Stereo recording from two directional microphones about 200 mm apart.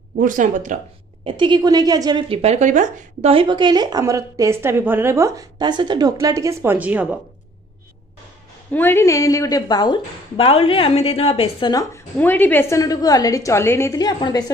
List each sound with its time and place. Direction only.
0.2 s speech: 40° right (ahead or behind)
1.2 s a woman's voice: 25° right (ahead or behind); by 7.2 s 5° right (ahead or behind)
8.7 s a woman's voice: 10° left (ahead or behind); by 11.7 s 30° left (ahead or behind)
11.7 s a woman's voice: 10° left (ahead or behind)